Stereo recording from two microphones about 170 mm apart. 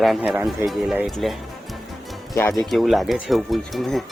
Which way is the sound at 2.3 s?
15° left (ahead or behind).